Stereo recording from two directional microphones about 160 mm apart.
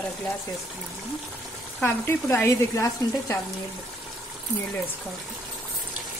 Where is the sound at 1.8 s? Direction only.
15° left (ahead or behind).